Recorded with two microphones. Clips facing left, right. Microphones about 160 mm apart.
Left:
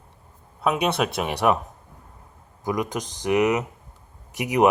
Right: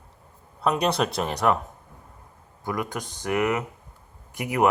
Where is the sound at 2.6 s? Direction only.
20° left (ahead or behind).